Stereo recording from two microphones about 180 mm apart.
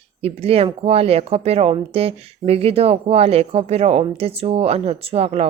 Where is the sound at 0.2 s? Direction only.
35° right (ahead or behind).